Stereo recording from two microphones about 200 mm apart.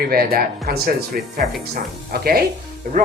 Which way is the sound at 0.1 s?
50° right (ahead or behind).